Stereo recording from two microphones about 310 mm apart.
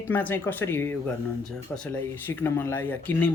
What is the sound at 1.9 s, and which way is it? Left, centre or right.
Speech, centre.